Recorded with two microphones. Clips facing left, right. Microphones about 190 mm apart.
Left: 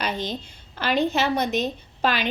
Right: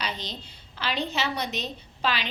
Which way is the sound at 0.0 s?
50° left (ahead or behind).